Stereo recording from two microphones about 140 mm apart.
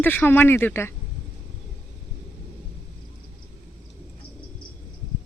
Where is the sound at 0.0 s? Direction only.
15° left (ahead or behind).